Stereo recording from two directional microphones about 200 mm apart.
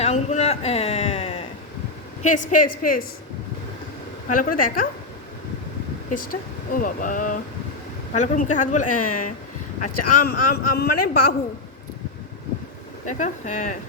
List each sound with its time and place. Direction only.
0.0 s a sound: 35° left (ahead or behind)
2.2 s a woman's voice: 40° left (ahead or behind)
4.3 s speech: 45° left (ahead or behind)
6.1 s a woman's voice: 45° left (ahead or behind)
13.1 s a woman's voice: 35° left (ahead or behind)